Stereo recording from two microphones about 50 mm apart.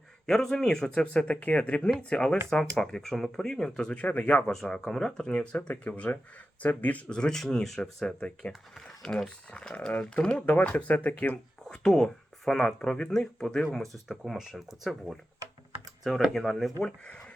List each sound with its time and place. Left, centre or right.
0.3 s speech: centre
3.9 s speech: left
4.7 s speech: centre
5.3 s speech: left
7.1 s speech: centre
11.6 s speech: centre
13.6 s speech: centre
17.1 s a sound: left